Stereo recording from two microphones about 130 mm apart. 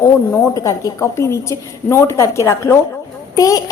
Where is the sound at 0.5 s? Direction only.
25° left (ahead or behind).